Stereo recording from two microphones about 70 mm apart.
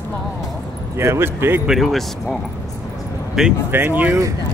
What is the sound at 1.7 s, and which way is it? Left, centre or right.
Speech, centre.